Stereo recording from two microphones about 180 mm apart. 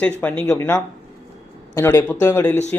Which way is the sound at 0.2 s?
10° left (ahead or behind).